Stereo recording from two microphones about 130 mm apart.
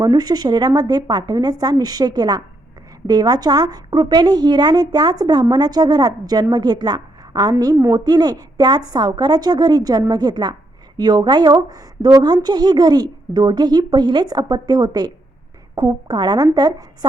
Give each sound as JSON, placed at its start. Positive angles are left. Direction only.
{"t": 0.0, "sound": "speech", "side_deg": -30}